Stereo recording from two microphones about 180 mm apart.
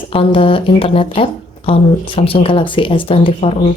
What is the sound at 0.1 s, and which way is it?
A woman's voice, 30° left (ahead or behind).